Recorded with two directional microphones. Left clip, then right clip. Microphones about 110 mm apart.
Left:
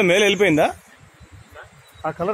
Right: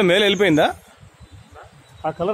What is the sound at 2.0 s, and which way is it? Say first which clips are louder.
Speech: right 1 dB; 15° right (ahead or behind).